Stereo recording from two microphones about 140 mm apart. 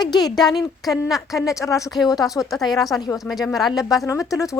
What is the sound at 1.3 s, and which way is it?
Speech, 25° left (ahead or behind).